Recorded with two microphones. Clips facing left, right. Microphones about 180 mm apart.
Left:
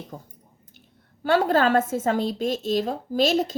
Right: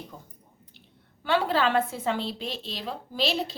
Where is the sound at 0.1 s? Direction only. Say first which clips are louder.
Left 6 dB; 45° left (ahead or behind).